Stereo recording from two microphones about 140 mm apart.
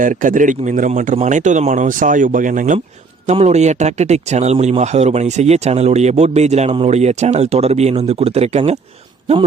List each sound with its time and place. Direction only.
0.0 s a man's voice: 70° right (ahead or behind)
3.2 s speech: 50° right (ahead or behind)